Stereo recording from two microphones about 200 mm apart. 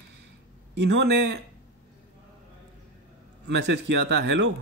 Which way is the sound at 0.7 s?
60° right (ahead or behind).